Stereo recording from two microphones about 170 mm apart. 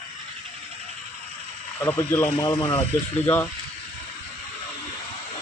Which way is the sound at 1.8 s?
10° left (ahead or behind).